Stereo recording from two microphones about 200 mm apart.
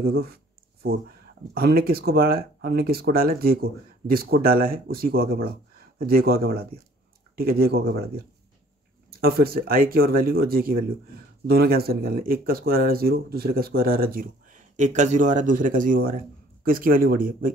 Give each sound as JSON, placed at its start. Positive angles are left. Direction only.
{"t": 1.5, "sound": "speech", "side_deg": -50}
{"t": 9.1, "sound": "speech", "side_deg": -50}